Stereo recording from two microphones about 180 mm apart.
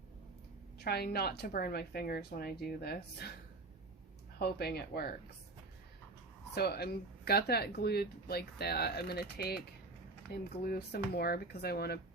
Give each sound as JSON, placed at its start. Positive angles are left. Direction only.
{"t": 0.9, "sound": "speech", "side_deg": 60}
{"t": 4.4, "sound": "speech", "side_deg": 60}
{"t": 6.5, "sound": "speech", "side_deg": 60}